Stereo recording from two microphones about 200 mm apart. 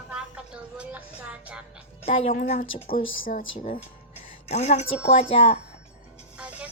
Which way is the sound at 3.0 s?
80° left.